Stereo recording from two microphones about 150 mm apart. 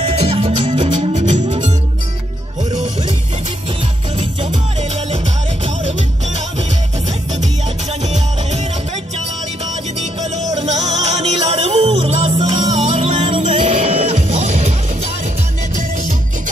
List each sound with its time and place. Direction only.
0.0 s music: 45° right (ahead or behind)
4.2 s music: 45° right (ahead or behind)
8.0 s music: 50° right (ahead or behind)
10.3 s music: 50° right (ahead or behind); by 12.8 s 30° right (ahead or behind)
12.8 s music: 45° right (ahead or behind)